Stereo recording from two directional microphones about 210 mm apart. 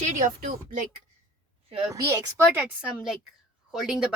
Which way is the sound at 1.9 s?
15° right (ahead or behind).